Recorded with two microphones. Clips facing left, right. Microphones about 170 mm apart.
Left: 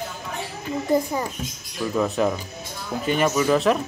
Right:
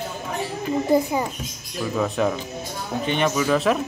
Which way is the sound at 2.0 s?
5° left (ahead or behind).